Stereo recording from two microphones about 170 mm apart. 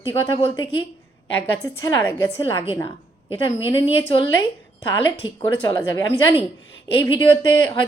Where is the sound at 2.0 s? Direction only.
15° left (ahead or behind).